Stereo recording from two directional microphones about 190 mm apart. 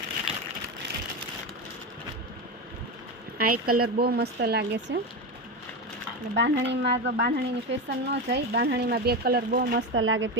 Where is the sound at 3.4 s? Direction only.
50° right (ahead or behind).